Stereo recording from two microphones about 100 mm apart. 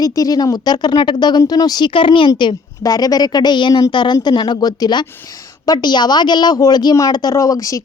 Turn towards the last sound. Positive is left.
turn(degrees=35)  # may be behind; listen again after turning